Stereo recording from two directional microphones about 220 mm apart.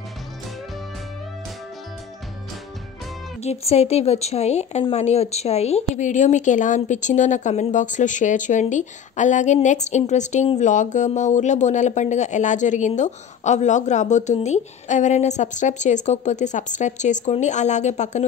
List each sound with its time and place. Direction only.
3.4 s speech: 30° left (ahead or behind)